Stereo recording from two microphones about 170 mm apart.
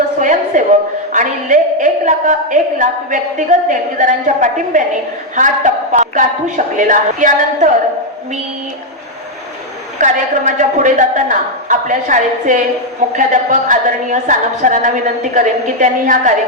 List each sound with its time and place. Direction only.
0.2 s a sound: 50° right (ahead or behind)
1.1 s a woman's voice: 50° right (ahead or behind)
10.0 s a woman's voice: 45° right (ahead or behind)